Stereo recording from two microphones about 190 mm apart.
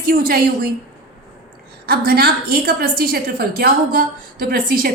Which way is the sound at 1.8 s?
55° right (ahead or behind).